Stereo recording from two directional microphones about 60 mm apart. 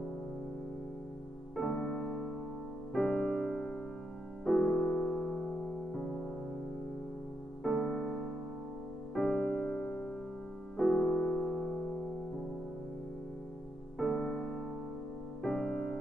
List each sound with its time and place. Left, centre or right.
1.6 s music: centre
7.8 s music: centre
13.9 s music: centre